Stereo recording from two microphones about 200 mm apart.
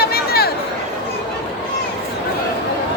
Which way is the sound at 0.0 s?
50° left (ahead or behind).